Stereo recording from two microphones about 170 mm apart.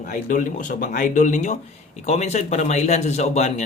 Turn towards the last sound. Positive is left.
turn(degrees=40)  # may be behind; listen again after turning